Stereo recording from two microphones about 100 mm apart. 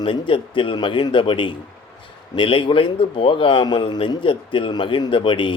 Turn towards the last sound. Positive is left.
turn(degrees=55)  # may be behind; listen again after turning